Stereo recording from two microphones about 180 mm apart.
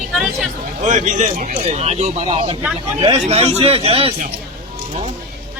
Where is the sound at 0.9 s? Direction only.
40° right (ahead or behind).